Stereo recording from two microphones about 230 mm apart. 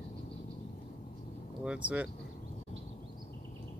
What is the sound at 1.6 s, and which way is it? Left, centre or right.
Speech, centre.